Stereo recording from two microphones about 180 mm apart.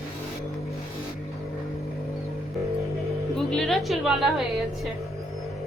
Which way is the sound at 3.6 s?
Centre (ahead or behind).